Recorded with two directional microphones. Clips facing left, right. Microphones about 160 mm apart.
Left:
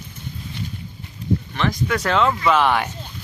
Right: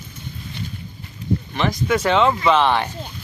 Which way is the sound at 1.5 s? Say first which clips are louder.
Right 5 dB; 5° right (ahead or behind).